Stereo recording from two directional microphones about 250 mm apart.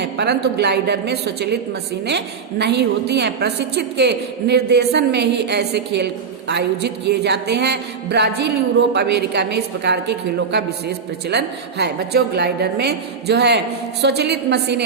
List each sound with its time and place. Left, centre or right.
0.0 s a woman's voice: right